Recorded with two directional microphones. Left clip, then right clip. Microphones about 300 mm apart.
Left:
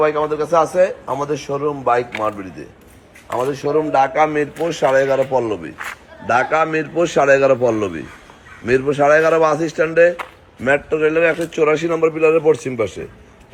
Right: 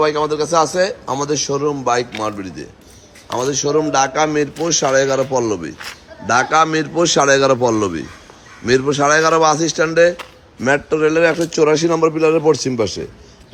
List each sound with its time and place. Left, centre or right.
0.0 s a man's voice: centre